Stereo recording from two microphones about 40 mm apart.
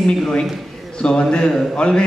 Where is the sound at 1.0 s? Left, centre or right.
Left.